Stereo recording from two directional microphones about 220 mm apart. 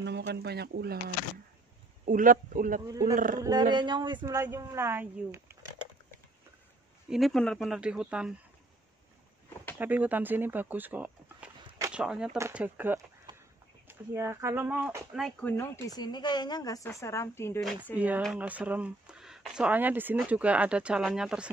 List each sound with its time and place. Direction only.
0.0 s a man's voice: 50° right (ahead or behind)
2.9 s speech: 15° right (ahead or behind)
7.1 s speech: centre (ahead or behind)
9.8 s speech: 5° right (ahead or behind)
13.3 s a sound: 20° right (ahead or behind)
13.8 s speech: 10° right (ahead or behind)
15.2 s speech: 10° left (ahead or behind)
17.9 s speech: 5° right (ahead or behind)